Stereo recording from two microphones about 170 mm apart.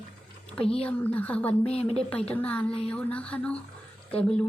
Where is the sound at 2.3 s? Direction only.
10° left (ahead or behind).